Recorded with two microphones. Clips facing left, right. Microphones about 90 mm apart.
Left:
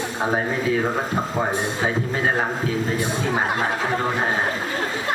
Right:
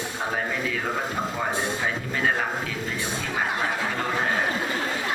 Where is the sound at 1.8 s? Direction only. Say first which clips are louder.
Left 5 dB; 35° left (ahead or behind).